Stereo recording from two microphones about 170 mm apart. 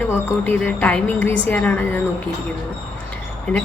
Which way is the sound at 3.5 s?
Centre (ahead or behind).